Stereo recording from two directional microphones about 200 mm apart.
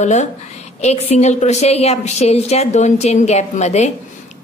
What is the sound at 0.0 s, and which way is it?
A woman's voice, 35° left (ahead or behind).